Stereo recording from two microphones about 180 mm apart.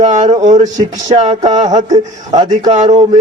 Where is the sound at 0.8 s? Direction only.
20° right (ahead or behind).